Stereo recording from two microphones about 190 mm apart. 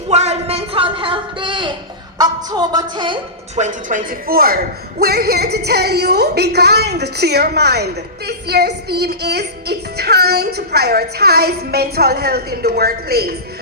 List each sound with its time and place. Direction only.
0.1 s a man's voice: 35° right (ahead or behind)
2.1 s music: 20° right (ahead or behind)
3.5 s a man's voice: 40° right (ahead or behind); by 13.3 s 55° right (ahead or behind)